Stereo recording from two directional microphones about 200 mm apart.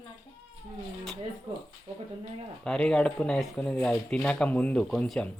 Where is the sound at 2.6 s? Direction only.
5° left (ahead or behind).